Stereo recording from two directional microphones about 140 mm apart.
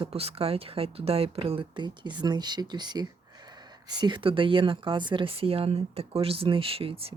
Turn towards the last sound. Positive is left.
turn(degrees=-40)  # may be behind; listen again after turning